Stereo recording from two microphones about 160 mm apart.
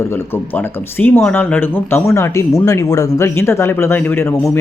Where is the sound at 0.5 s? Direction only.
10° left (ahead or behind).